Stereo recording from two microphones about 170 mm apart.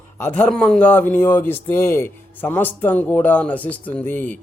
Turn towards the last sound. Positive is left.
turn(degrees=10)  # may be behind; listen again after turning